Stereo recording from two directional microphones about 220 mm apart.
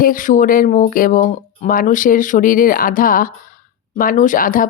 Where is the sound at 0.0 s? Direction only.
40° left (ahead or behind).